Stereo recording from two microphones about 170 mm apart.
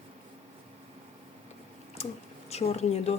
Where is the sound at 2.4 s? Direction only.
40° left (ahead or behind).